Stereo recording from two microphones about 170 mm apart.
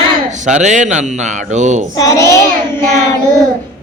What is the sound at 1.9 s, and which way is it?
Speech, 20° left (ahead or behind).